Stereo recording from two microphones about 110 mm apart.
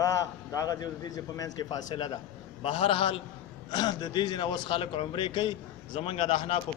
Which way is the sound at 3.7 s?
40° left (ahead or behind).